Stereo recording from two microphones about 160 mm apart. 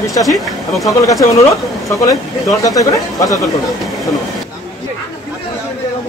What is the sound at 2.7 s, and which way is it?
Speech, 20° left (ahead or behind).